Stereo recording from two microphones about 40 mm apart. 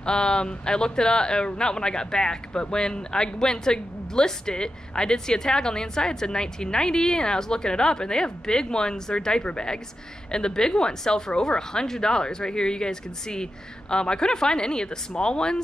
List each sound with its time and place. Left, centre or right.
0.0 s a woman's voice: left